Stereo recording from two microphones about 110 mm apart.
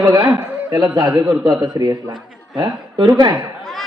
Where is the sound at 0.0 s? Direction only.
35° right (ahead or behind).